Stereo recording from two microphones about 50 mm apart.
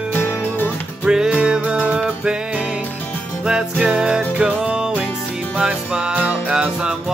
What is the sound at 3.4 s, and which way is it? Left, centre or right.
Music, centre.